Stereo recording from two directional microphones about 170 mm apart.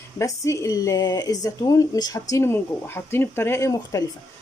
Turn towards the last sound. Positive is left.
turn(degrees=20)  # may be behind; listen again after turning